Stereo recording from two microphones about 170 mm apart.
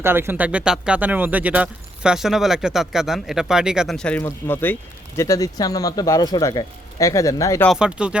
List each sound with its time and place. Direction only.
0.0 s speech: 15° right (ahead or behind); by 7.7 s 20° left (ahead or behind)
7.7 s speech: 5° right (ahead or behind)